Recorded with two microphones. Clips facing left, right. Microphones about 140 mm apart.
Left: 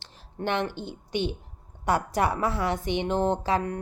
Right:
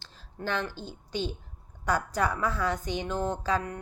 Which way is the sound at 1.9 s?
25° left (ahead or behind).